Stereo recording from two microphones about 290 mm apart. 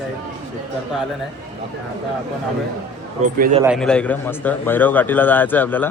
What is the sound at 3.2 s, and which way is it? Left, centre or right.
Speech, right.